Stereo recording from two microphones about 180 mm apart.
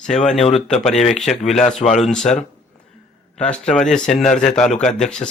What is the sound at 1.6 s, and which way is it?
Speech, 40° left (ahead or behind).